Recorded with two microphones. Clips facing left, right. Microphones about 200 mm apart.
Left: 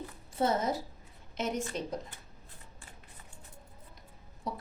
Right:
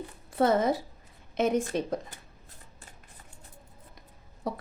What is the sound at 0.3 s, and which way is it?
A woman's voice, 55° right (ahead or behind).